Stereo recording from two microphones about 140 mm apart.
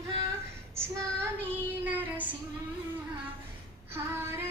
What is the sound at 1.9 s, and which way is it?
Child singing, 10° right (ahead or behind).